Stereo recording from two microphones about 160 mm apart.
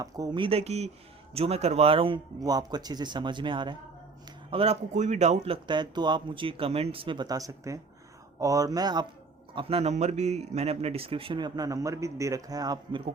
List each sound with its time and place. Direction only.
0.0 s a man's voice: 25° right (ahead or behind); by 5.5 s 45° right (ahead or behind)
5.6 s a man's voice: 30° right (ahead or behind)